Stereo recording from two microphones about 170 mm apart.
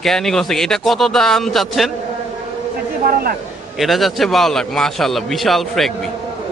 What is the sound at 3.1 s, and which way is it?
Speech, 60° right (ahead or behind).